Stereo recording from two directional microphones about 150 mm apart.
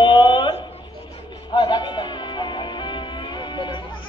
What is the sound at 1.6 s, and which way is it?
Music, 30° left (ahead or behind).